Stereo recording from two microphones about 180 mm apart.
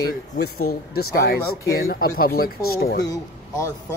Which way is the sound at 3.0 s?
20° left (ahead or behind).